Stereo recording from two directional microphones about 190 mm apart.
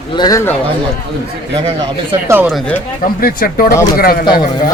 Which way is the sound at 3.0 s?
50° left (ahead or behind).